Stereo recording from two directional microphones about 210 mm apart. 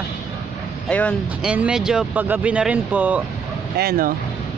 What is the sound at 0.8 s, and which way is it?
Speech, 5° left (ahead or behind).